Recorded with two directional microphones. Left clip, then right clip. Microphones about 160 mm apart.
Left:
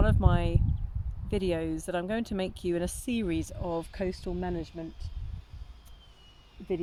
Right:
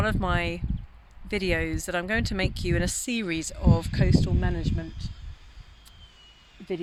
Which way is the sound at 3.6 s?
30° right (ahead or behind).